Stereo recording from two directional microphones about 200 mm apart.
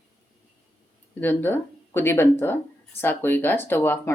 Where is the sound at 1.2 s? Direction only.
10° left (ahead or behind).